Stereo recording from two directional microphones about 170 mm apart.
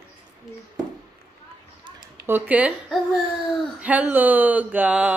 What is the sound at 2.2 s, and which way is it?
Speech, 10° right (ahead or behind).